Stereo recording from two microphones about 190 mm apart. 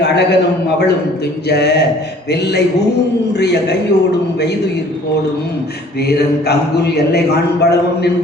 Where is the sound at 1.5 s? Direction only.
60° left (ahead or behind).